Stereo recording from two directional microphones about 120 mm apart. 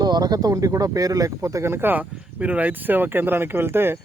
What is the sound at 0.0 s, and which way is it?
Speech, 35° right (ahead or behind).